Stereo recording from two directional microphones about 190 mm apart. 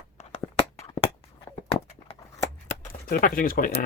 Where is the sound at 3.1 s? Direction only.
45° left (ahead or behind).